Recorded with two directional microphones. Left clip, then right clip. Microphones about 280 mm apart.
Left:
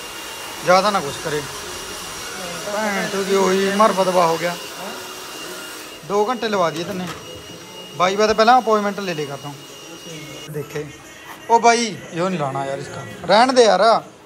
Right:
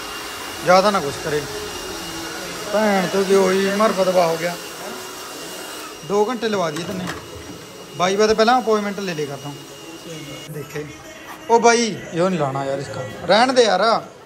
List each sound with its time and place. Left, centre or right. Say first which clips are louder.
0.7 s a man's voice: right 1 dB; centre
2.8 s speech: right 4 dB; centre
6.0 s a man's voice: even; centre
11.4 s a man's voice: even; centre